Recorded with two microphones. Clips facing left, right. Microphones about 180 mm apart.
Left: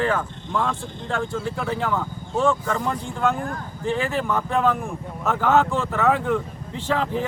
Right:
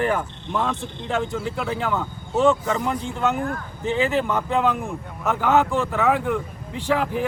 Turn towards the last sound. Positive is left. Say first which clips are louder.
# right 1 dB
turn(degrees=-10)  # may be behind; listen again after turning